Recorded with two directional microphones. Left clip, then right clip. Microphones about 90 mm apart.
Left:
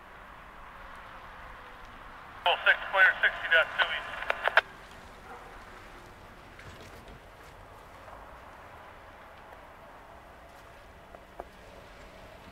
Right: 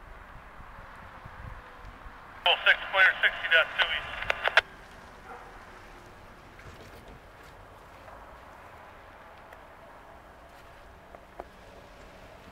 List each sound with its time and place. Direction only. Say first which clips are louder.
2.4 s speech: right 2 dB; 40° right (ahead or behind)